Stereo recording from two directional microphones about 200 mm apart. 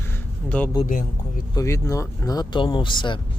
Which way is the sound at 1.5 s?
15° left (ahead or behind).